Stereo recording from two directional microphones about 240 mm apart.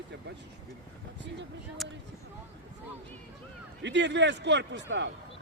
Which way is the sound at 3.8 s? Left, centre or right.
Right.